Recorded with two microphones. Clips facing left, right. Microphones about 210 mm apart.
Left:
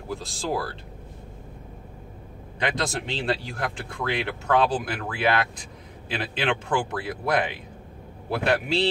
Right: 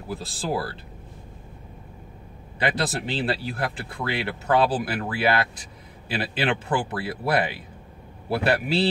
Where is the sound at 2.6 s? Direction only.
5° right (ahead or behind).